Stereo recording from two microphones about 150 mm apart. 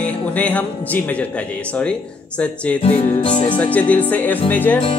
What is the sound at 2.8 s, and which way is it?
Music, 45° left (ahead or behind).